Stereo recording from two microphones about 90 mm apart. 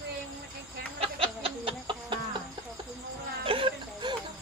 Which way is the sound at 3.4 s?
85° right.